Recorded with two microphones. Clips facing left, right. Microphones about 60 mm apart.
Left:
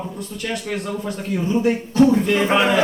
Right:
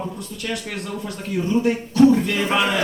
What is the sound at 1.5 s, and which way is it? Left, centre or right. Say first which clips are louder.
Speech: left 1 dB; centre.